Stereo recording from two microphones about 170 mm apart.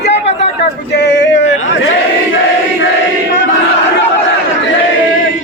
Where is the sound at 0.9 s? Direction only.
90° left.